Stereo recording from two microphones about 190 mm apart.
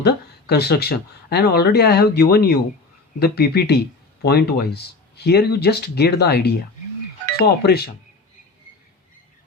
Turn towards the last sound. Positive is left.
turn(degrees=55)  # may be behind; listen again after turning